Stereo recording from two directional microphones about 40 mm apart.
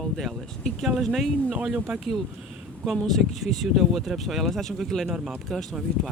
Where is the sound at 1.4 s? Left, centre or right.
Right.